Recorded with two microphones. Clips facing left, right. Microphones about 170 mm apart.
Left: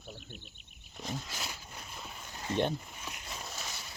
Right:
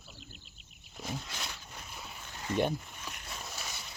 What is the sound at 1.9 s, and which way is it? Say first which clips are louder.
Boat: left 1 dB; 5° right (ahead or behind).